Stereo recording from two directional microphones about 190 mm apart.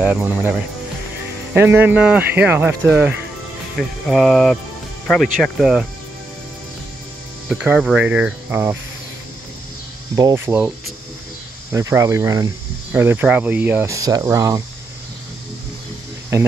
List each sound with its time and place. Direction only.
0.0 s speech: 10° right (ahead or behind)
3.7 s speech: centre (ahead or behind)
7.4 s speech: 5° right (ahead or behind)
10.1 s speech: 15° right (ahead or behind)
11.7 s speech: 15° right (ahead or behind)